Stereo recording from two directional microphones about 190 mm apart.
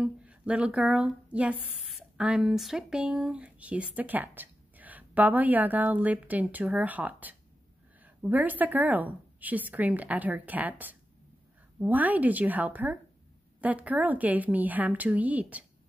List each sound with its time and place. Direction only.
0.0 s speech: 5° right (ahead or behind)